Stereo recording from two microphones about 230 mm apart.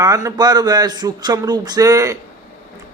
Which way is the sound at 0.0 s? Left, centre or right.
Centre.